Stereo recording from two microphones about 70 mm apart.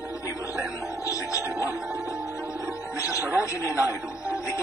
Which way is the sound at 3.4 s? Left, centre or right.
Left.